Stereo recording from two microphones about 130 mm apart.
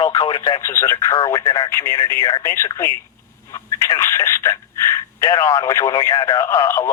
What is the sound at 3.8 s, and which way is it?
Telephone, 20° left (ahead or behind).